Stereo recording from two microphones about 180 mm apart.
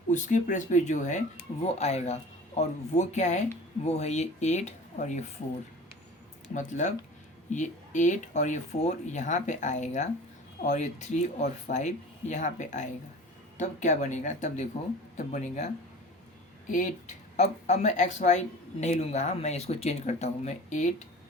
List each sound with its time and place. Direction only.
0.1 s speech: 45° left (ahead or behind)
6.5 s speech: 45° left (ahead or behind)